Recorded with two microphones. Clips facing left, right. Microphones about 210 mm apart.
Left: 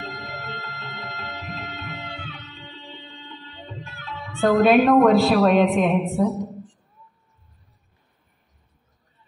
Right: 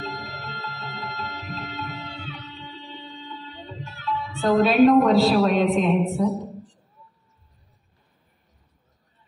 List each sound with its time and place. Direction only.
0.0 s music: 55° left (ahead or behind)
3.8 s speech: 50° left (ahead or behind)